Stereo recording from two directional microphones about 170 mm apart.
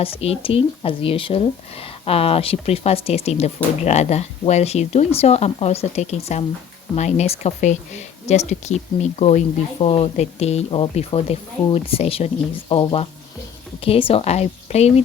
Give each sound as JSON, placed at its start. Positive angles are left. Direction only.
{"t": 0.0, "sound": "speech", "side_deg": 35}